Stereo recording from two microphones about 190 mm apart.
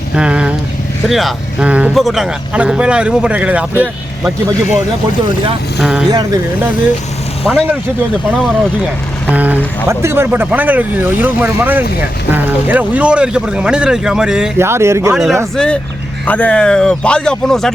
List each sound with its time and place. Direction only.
0.2 s speech: 5° right (ahead or behind)
5.8 s speech: centre (ahead or behind)
6.1 s speech: 20° right (ahead or behind)
9.3 s speech: 10° right (ahead or behind)
15.1 s speech: centre (ahead or behind)